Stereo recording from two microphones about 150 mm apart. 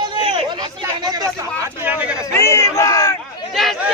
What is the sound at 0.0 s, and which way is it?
Chatter, 35° right (ahead or behind).